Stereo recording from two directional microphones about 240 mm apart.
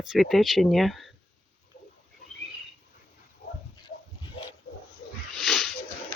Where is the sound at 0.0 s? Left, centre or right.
Centre.